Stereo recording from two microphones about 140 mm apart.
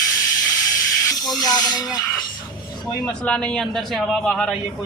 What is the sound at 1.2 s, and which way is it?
Speech, 25° left (ahead or behind).